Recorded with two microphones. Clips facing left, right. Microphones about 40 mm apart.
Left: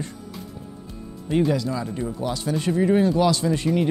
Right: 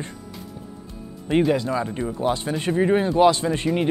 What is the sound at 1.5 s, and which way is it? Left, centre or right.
Speech, right.